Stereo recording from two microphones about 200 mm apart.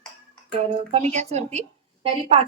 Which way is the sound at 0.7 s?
30° right (ahead or behind).